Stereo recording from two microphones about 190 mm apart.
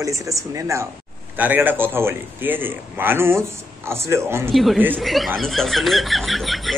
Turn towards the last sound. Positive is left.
turn(degrees=0)  # may be behind; listen again after turning